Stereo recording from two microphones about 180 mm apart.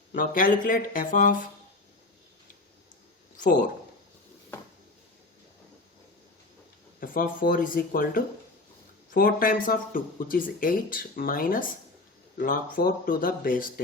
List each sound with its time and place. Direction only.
0.1 s speech: 50° left (ahead or behind)
3.3 s a man's voice: 45° left (ahead or behind)
7.0 s speech: 55° left (ahead or behind)